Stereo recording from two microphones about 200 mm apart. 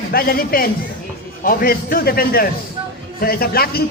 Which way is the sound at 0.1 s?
50° left (ahead or behind).